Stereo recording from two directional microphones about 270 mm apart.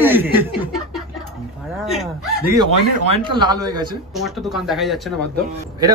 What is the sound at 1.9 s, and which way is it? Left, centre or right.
Speech, centre.